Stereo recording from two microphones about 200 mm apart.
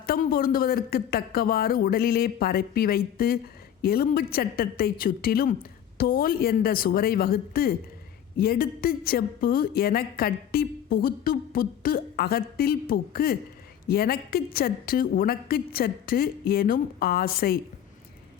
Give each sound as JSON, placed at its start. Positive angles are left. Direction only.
{"t": 0.0, "sound": "a woman's voice", "side_deg": 50}